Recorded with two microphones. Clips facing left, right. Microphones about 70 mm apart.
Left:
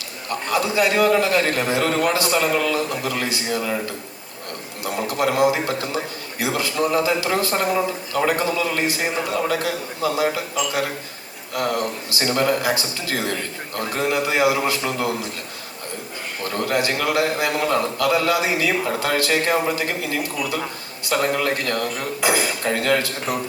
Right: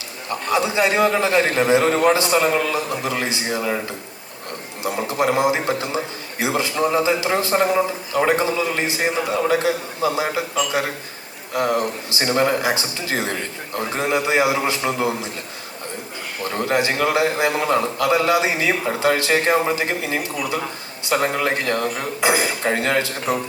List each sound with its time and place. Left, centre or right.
0.3 s a man's voice: right
11.5 s a man's voice: right
16.4 s a man's voice: right